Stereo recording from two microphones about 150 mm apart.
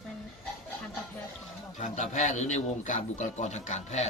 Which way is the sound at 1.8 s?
50° left (ahead or behind).